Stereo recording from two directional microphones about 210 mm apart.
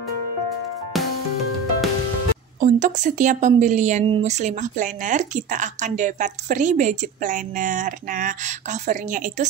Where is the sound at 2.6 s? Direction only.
35° right (ahead or behind).